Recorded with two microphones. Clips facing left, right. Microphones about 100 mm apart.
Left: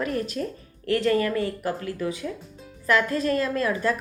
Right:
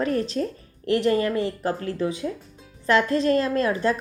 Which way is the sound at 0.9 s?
20° right (ahead or behind).